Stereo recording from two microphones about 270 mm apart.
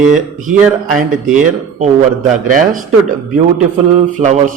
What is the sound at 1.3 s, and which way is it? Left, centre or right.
A man's voice, right.